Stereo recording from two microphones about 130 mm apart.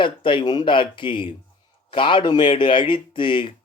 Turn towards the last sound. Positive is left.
turn(degrees=40)  # may be behind; listen again after turning